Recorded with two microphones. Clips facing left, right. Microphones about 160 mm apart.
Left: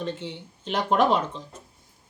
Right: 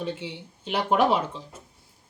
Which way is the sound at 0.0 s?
10° right (ahead or behind).